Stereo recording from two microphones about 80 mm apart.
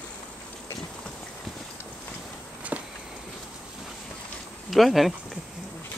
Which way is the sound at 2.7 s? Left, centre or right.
Right.